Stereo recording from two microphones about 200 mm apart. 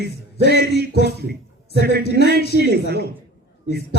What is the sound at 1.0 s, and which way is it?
A man's voice, 55° right (ahead or behind).